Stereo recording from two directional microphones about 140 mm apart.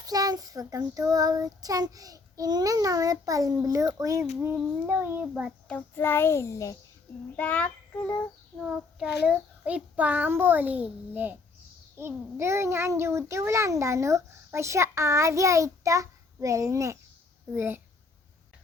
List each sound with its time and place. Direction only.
0.0 s a child's voice: 25° right (ahead or behind); by 5.5 s 5° right (ahead or behind)
5.6 s a child's voice: 15° left (ahead or behind)
7.3 s a child's voice: 10° left (ahead or behind)
8.5 s a child's voice: 5° right (ahead or behind)